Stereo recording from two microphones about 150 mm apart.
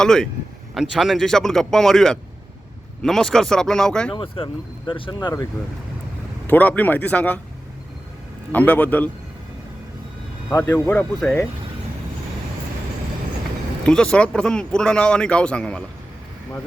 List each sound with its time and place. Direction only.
0.0 s speech: 5° left (ahead or behind)
4.1 s speech: 35° left (ahead or behind)
6.5 s speech: 10° left (ahead or behind)
8.5 s speech: 10° left (ahead or behind)
10.5 s a man's voice: 20° left (ahead or behind)
10.9 s speech: 5° left (ahead or behind)
13.8 s speech: 5° left (ahead or behind)